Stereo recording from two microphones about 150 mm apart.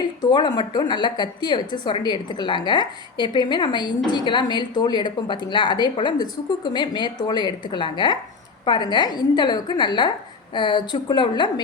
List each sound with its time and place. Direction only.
0.2 s a woman's voice: 30° left (ahead or behind)